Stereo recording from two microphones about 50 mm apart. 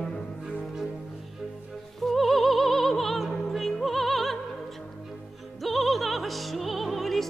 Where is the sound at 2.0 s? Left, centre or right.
Centre.